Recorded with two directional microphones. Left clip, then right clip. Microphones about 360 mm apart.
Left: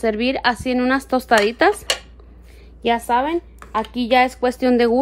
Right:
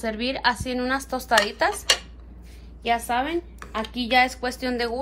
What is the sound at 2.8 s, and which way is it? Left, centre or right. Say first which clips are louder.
A woman's voice: left 5 dB; left.